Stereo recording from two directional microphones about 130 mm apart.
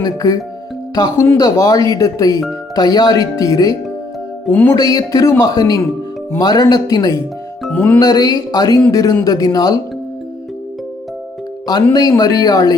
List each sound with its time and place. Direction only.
0.0 s speech: 30° left (ahead or behind)
7.7 s music: 10° left (ahead or behind)
7.9 s speech: 30° left (ahead or behind)
11.7 s speech: 30° left (ahead or behind)